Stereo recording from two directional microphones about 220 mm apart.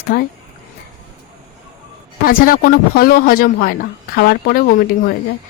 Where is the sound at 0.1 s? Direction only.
45° left (ahead or behind).